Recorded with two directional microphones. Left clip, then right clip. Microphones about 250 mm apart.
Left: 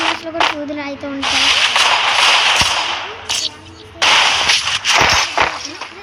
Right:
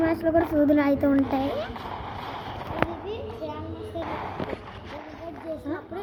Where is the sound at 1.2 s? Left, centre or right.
Left.